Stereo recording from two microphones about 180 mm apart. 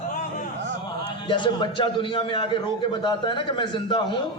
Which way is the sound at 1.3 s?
25° left (ahead or behind).